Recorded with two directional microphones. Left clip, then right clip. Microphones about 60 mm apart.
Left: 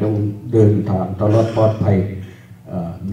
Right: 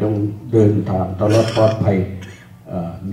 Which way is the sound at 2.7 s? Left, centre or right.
Centre.